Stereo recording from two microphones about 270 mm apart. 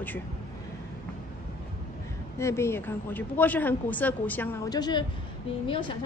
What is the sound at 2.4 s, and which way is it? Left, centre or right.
A woman's voice, centre.